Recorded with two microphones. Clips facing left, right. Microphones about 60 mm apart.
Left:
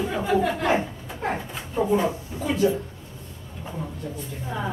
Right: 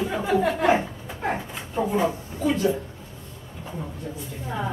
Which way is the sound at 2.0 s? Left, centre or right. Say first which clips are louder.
Right 2 dB; centre.